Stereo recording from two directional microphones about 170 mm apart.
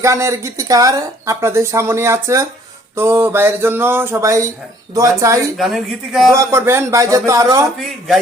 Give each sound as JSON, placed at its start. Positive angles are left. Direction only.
{"t": 0.0, "sound": "speech", "side_deg": -15}
{"t": 5.5, "sound": "speech", "side_deg": 0}
{"t": 6.3, "sound": "speech", "side_deg": -15}
{"t": 7.8, "sound": "speech", "side_deg": 0}